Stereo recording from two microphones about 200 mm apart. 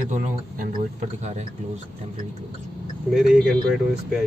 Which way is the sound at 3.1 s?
Centre (ahead or behind).